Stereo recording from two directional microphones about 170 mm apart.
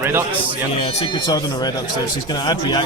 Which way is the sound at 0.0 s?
15° right (ahead or behind).